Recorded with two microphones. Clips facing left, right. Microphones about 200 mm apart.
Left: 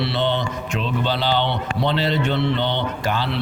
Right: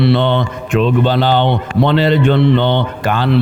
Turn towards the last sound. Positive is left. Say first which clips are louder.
# right 6 dB
turn(degrees=-55)  # may be behind; listen again after turning